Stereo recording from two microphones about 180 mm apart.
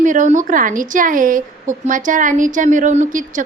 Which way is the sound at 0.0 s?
45° right (ahead or behind).